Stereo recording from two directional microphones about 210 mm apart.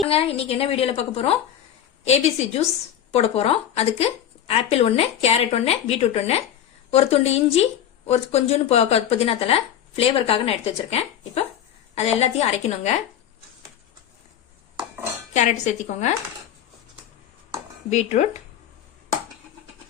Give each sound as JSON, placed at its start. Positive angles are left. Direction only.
{"t": 0.1, "sound": "speech", "side_deg": 25}
{"t": 12.2, "sound": "speech", "side_deg": 30}
{"t": 15.3, "sound": "speech", "side_deg": 35}
{"t": 17.8, "sound": "speech", "side_deg": 35}